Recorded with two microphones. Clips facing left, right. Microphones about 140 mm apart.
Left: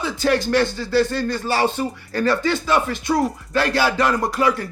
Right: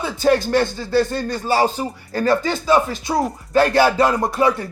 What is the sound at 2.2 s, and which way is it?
Speech, 45° right (ahead or behind).